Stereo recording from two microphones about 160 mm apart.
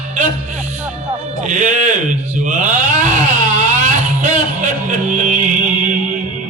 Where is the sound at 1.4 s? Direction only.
50° right (ahead or behind).